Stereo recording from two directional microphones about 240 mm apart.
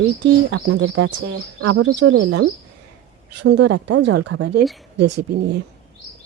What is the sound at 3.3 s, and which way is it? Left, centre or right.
Speech, right.